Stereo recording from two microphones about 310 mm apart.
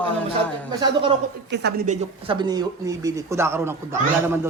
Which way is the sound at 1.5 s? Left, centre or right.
Right.